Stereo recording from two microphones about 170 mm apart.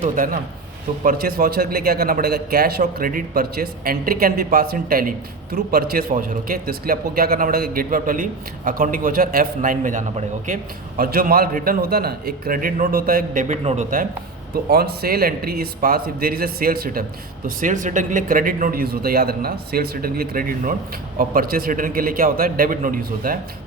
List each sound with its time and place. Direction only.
1.0 s a man's voice: 60° right (ahead or behind); by 13.8 s 40° right (ahead or behind)
14.5 s a man's voice: 65° right (ahead or behind)
17.6 s a man's voice: 50° right (ahead or behind)